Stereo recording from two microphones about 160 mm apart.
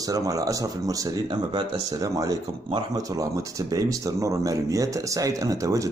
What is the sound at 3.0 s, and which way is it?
Speech, 20° right (ahead or behind).